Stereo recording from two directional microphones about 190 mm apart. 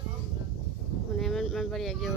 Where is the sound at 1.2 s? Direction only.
Centre (ahead or behind).